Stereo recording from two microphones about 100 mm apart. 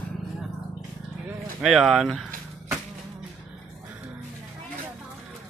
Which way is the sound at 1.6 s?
Centre (ahead or behind).